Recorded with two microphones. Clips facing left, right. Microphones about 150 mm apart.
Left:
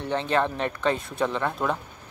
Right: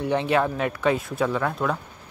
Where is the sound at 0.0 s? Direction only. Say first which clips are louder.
Right 3 dB; 10° right (ahead or behind).